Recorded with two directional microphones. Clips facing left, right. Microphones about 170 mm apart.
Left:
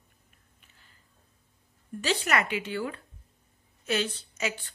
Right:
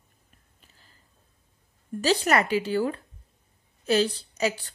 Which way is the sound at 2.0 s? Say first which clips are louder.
Right 5 dB; 40° right (ahead or behind).